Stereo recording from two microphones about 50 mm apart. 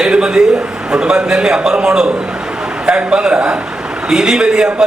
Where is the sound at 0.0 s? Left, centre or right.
Centre.